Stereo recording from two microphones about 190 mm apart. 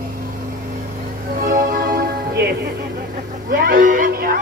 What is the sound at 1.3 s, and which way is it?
Music, 45° right (ahead or behind).